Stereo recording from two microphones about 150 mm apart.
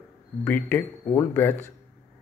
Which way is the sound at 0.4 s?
10° left (ahead or behind).